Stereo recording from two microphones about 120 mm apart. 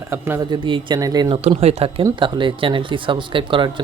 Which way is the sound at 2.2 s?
45° right (ahead or behind).